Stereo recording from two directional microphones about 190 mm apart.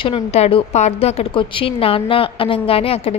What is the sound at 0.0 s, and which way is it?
A woman's voice, 30° left (ahead or behind).